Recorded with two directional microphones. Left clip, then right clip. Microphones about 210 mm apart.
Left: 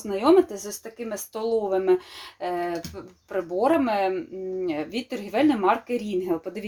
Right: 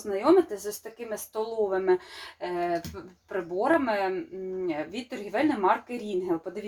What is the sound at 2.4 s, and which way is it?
A woman's voice, 45° left (ahead or behind).